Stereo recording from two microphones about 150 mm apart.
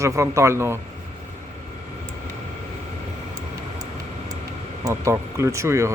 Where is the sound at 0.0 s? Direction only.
20° right (ahead or behind).